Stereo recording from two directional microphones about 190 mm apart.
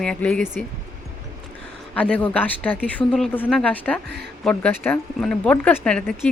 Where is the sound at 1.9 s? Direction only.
5° left (ahead or behind).